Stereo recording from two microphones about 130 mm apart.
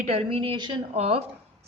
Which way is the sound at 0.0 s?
60° right (ahead or behind).